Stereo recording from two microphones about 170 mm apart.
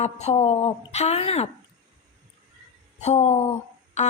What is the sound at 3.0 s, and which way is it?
Speech, 40° left (ahead or behind).